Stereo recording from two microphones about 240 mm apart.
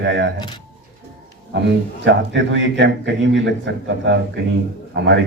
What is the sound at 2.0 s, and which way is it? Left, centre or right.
A man's voice, right.